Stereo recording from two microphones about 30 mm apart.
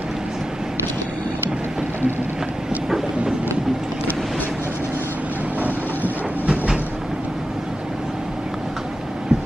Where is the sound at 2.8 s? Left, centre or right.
Centre.